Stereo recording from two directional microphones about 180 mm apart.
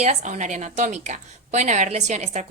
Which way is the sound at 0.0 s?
40° right (ahead or behind).